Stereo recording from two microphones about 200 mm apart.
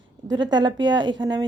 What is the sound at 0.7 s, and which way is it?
Speech, 65° right (ahead or behind).